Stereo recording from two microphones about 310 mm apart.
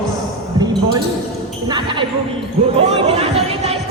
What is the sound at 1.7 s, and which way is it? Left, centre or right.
Speech, centre.